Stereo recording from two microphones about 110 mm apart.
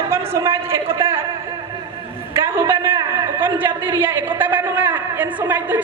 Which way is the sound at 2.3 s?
20° right (ahead or behind).